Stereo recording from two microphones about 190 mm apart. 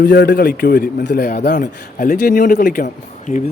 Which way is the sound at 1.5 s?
45° left (ahead or behind).